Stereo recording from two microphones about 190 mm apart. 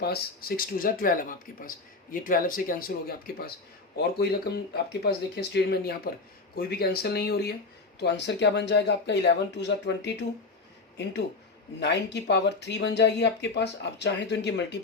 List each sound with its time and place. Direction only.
0.0 s speech: 55° left (ahead or behind)